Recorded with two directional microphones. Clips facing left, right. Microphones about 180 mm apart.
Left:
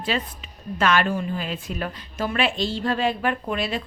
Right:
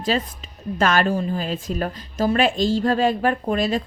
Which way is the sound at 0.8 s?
40° right (ahead or behind).